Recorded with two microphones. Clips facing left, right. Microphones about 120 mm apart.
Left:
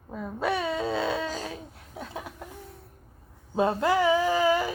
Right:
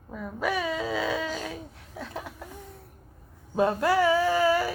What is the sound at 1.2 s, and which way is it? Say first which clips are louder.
Babbling: even; 40° left (ahead or behind).